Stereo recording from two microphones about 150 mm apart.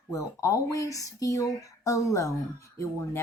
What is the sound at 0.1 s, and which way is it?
Speech, 20° left (ahead or behind).